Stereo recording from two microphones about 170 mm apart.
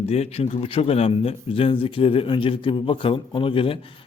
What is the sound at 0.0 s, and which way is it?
Speech, 40° left (ahead or behind).